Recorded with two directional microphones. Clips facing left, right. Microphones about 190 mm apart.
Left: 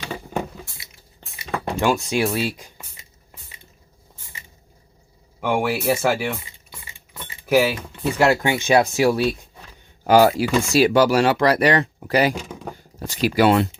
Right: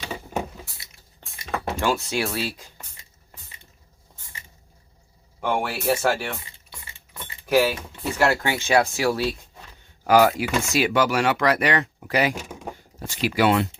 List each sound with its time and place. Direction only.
1.2 s cutlery: centre (ahead or behind)
1.8 s speech: 15° left (ahead or behind)
5.4 s typing: 5° left (ahead or behind)
8.2 s speech: 20° left (ahead or behind)
10.0 s speech: 30° left (ahead or behind)